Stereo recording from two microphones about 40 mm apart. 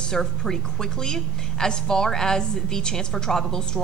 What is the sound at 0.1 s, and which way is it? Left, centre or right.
A woman's voice, centre.